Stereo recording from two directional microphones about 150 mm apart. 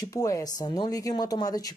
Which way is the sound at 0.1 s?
20° left (ahead or behind).